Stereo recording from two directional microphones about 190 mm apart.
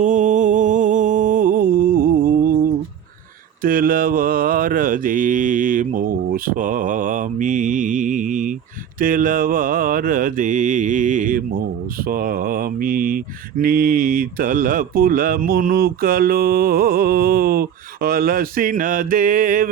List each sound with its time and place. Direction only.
0.0 s mantra: 40° right (ahead or behind)
3.6 s mantra: 50° right (ahead or behind)